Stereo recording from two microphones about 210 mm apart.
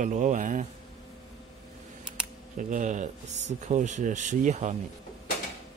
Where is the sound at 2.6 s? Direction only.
35° right (ahead or behind).